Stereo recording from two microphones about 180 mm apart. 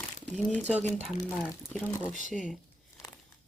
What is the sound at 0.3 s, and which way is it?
Speech, 5° left (ahead or behind).